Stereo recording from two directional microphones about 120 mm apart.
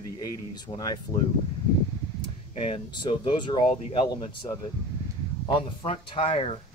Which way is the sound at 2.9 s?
40° left (ahead or behind).